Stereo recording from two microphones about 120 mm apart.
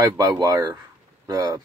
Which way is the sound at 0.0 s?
30° right (ahead or behind).